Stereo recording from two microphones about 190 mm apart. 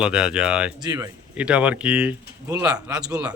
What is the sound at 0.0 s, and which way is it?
Speech, 5° right (ahead or behind).